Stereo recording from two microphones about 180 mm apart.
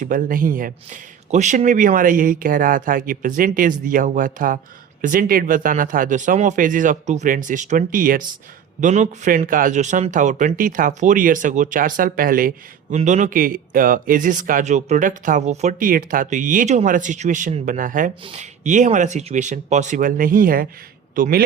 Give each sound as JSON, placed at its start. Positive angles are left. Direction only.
{"t": 0.0, "sound": "speech", "side_deg": -50}
{"t": 13.0, "sound": "speech", "side_deg": -40}